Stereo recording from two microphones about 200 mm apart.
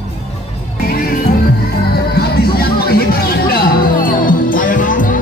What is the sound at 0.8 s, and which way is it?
Music, 45° left (ahead or behind).